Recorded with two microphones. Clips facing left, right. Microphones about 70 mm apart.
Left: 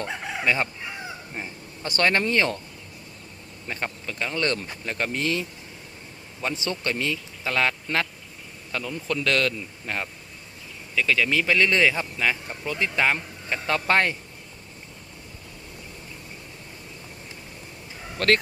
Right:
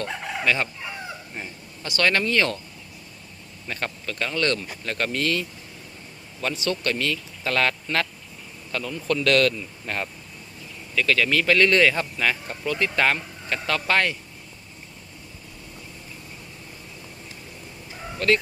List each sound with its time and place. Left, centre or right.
0.0 s chicken: left
1.8 s speech: left
3.7 s speech: centre
4.3 s speech: left
9.8 s speech: centre
13.1 s speech: left
18.2 s speech: left